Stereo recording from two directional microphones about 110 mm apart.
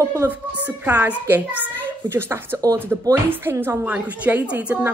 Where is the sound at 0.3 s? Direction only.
15° right (ahead or behind).